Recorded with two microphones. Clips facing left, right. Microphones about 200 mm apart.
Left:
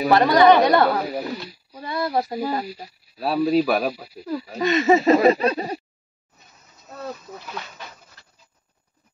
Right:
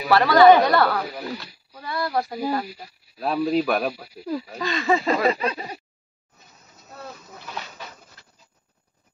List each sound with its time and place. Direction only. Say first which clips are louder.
0.1 s speech: right 1 dB; 20° left (ahead or behind)
1.7 s a sound: left 2 dB; 20° left (ahead or behind)
3.2 s speech: left 3 dB; 5° left (ahead or behind)
4.6 s speech: left 7 dB; 20° left (ahead or behind)
5.3 s speech: left 5 dB; 35° left (ahead or behind)